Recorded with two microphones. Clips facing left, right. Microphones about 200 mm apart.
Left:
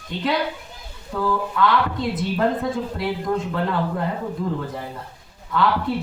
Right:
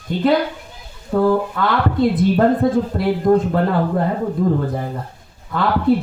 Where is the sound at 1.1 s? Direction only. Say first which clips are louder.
Right 6 dB; 50° right (ahead or behind).